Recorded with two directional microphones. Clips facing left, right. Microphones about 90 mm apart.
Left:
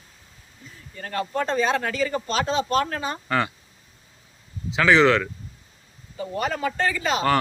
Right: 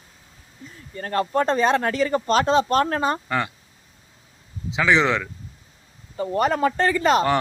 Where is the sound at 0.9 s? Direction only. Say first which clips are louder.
Right 5 dB; 45° right (ahead or behind).